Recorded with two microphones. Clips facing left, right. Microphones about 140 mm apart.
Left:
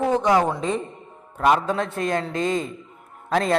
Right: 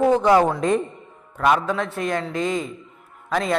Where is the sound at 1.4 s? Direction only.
25° left (ahead or behind).